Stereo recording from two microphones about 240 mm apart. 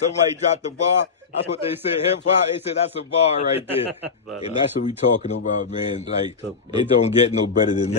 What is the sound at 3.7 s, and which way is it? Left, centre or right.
Speech, centre.